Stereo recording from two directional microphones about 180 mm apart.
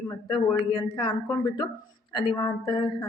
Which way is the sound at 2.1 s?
25° left (ahead or behind).